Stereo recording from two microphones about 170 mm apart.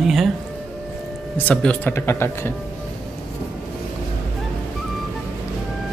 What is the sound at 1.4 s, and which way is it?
Speech, 10° left (ahead or behind).